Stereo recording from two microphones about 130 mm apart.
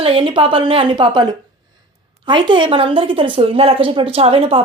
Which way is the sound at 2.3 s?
40° right (ahead or behind).